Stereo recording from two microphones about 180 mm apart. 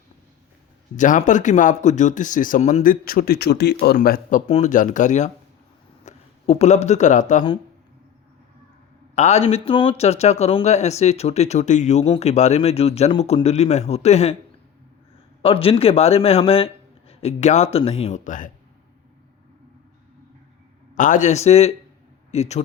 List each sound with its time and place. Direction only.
0.9 s speech: 45° left (ahead or behind)
9.1 s speech: 40° left (ahead or behind)
15.4 s speech: 30° left (ahead or behind)
20.9 s a man's voice: 45° left (ahead or behind)